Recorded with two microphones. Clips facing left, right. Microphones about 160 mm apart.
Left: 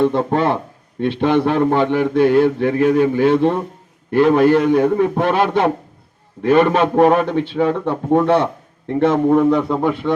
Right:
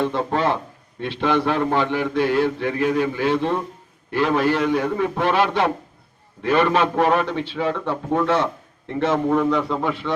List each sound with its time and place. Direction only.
0.0 s a man's voice: 50° left (ahead or behind)